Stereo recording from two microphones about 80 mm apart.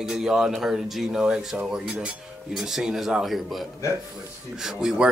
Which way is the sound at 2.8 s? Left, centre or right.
Centre.